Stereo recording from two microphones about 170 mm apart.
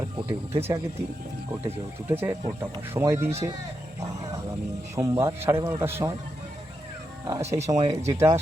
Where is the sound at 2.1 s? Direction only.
15° right (ahead or behind).